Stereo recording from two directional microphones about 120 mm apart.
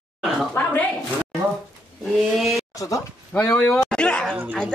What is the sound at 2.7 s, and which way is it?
Speech, 25° left (ahead or behind).